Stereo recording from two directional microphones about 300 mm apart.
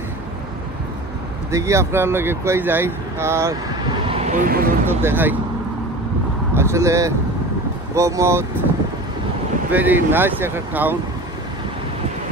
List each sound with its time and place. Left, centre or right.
1.5 s speech: centre
4.0 s speech: centre
5.0 s speech: centre
6.5 s speech: centre
9.7 s speech: centre